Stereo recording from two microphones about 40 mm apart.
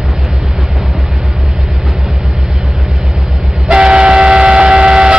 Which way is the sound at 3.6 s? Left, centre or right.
Right.